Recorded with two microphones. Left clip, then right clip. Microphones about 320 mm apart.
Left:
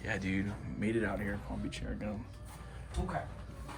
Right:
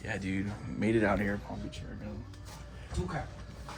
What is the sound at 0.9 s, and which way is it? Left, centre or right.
Speech, centre.